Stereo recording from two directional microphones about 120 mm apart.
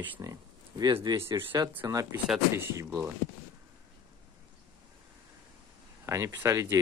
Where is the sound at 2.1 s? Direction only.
5° right (ahead or behind).